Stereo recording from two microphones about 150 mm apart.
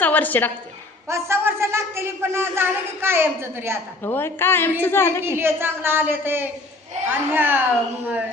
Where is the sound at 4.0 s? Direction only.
15° left (ahead or behind).